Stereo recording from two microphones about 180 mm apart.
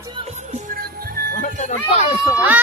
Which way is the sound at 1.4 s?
40° left (ahead or behind).